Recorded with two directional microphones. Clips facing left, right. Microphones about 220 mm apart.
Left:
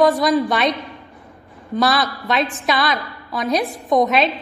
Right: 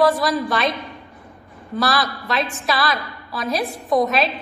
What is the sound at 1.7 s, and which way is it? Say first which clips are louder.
A woman's voice: left 3 dB; 20° left (ahead or behind).